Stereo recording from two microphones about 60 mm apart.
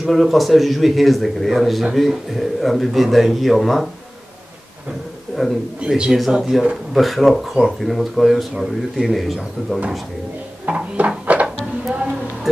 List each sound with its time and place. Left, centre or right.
0.0 s speech: centre
5.4 s speech: centre
10.7 s a sound: right